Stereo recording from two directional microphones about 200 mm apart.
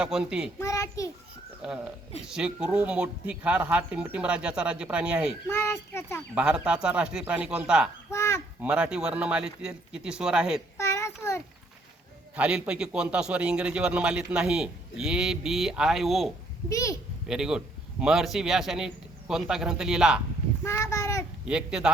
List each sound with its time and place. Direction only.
0.0 s a man's voice: 5° right (ahead or behind)
0.6 s a sound: 15° left (ahead or behind)
1.6 s a man's voice: 5° right (ahead or behind)
5.5 s a child's voice: 15° left (ahead or behind)
6.3 s a man's voice: 5° right (ahead or behind)
8.1 s a sound: 15° left (ahead or behind)
8.6 s a man's voice: 5° right (ahead or behind)
10.8 s a sound: 15° left (ahead or behind)
12.4 s a man's voice: 5° right (ahead or behind)
16.6 s a child's voice: 15° left (ahead or behind)
17.2 s a man's voice: 5° right (ahead or behind)
20.7 s a sound: 15° left (ahead or behind)
21.4 s a man's voice: 5° right (ahead or behind)